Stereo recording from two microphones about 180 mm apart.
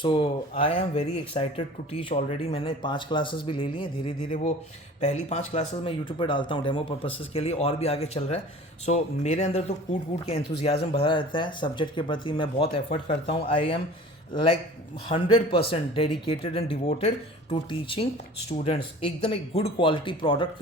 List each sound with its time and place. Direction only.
0.0 s speech: 30° left (ahead or behind)
4.9 s speech: 35° left (ahead or behind)
10.9 s speech: 30° left (ahead or behind)
15.1 s speech: 30° left (ahead or behind)